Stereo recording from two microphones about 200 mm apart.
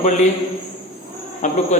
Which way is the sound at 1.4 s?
35° left (ahead or behind).